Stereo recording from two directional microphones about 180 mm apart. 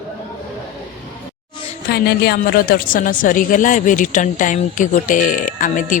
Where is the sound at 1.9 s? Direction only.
60° left (ahead or behind).